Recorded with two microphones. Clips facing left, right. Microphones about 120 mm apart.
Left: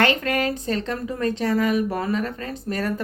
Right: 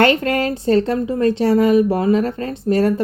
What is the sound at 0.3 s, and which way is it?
Speech, 30° right (ahead or behind).